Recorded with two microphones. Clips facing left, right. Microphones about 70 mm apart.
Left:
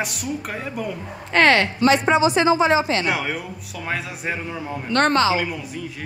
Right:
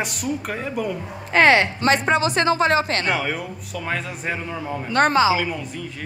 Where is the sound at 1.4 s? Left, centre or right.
Centre.